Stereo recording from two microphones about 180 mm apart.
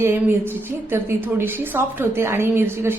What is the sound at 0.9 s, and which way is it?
A woman's voice, 10° right (ahead or behind).